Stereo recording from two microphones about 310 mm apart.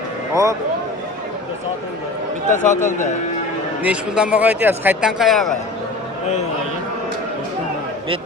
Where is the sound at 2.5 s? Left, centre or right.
Left.